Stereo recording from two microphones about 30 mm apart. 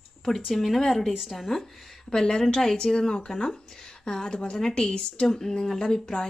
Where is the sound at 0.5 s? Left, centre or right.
Centre.